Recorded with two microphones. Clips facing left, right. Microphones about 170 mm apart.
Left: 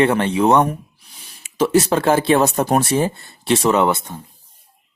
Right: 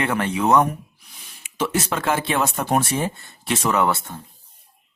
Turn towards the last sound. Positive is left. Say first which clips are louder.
# left 4 dB
turn(degrees=20)  # may be behind; listen again after turning